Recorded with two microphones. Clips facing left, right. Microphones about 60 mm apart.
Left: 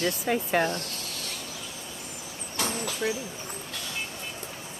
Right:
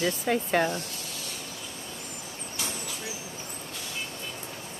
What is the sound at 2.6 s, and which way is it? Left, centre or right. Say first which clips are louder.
Vehicle: left 8 dB; left.